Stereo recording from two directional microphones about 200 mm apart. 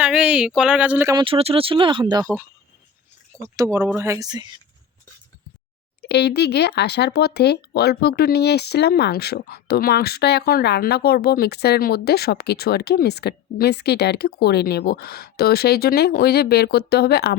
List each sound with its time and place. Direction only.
0.0 s speech: 5° right (ahead or behind)
1.2 s speech: 30° right (ahead or behind)
3.4 s speech: 15° right (ahead or behind)
6.0 s speech: 55° left (ahead or behind)